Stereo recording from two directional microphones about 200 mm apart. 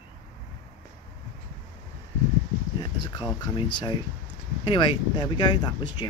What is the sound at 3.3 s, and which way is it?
Speech, 20° left (ahead or behind).